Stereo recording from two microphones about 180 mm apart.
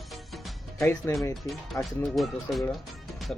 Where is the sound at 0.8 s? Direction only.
15° left (ahead or behind).